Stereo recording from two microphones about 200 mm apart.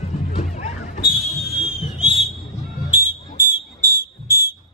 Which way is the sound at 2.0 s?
Centre (ahead or behind).